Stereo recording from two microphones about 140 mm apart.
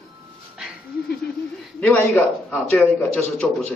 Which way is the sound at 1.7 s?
10° left (ahead or behind).